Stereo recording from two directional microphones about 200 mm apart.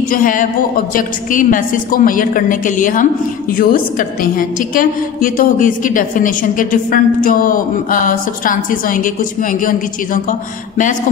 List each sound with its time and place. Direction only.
0.1 s a woman's voice: 40° left (ahead or behind)